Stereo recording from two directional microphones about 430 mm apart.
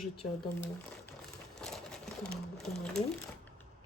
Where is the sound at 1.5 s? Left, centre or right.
Centre.